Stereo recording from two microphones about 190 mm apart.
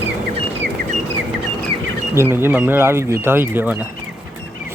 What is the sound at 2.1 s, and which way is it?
Speech, 10° right (ahead or behind).